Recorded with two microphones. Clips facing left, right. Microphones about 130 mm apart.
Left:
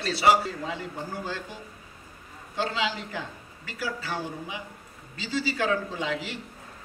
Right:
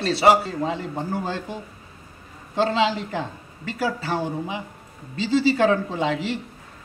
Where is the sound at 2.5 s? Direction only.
30° right (ahead or behind).